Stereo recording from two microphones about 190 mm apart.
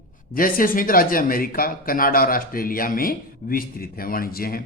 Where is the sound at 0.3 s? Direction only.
50° left (ahead or behind).